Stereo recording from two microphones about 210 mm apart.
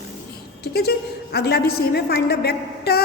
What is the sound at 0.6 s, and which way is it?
A woman's voice, 50° left (ahead or behind).